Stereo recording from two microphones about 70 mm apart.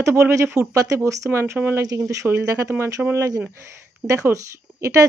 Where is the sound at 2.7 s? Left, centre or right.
Right.